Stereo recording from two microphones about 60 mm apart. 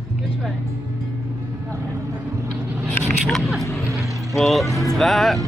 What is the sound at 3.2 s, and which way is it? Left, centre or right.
A man's voice, centre.